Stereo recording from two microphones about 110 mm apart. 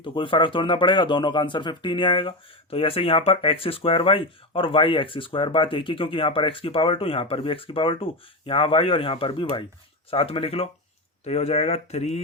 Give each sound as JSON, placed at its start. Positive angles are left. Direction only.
{"t": 0.0, "sound": "speech", "side_deg": 50}
{"t": 11.2, "sound": "speech", "side_deg": 85}